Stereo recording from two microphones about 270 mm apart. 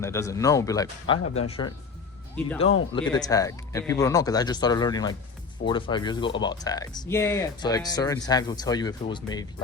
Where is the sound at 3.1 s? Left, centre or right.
Centre.